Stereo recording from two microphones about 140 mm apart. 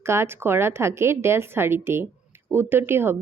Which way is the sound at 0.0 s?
20° right (ahead or behind).